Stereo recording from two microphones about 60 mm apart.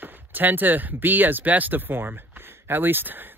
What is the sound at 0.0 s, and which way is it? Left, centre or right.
Speech, right.